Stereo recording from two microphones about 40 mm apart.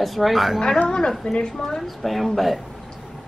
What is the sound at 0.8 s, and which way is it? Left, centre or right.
Speech, centre.